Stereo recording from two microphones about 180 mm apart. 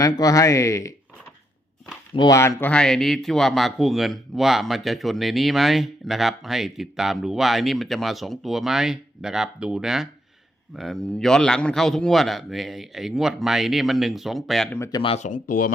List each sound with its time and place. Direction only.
0.0 s speech: 20° left (ahead or behind)
2.1 s speech: 20° left (ahead or behind); by 14.7 s centre (ahead or behind)
14.7 s speech: 20° left (ahead or behind)
15.1 s speech: 45° left (ahead or behind)